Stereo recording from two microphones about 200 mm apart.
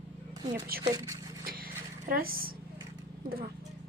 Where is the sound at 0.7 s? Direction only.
45° right (ahead or behind).